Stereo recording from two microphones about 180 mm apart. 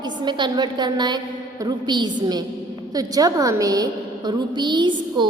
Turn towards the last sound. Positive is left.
turn(degrees=-25)  # may be behind; listen again after turning